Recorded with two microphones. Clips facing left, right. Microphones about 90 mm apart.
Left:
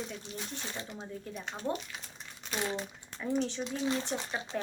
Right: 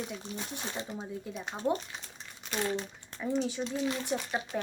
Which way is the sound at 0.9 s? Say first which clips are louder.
Right 3 dB; 10° right (ahead or behind).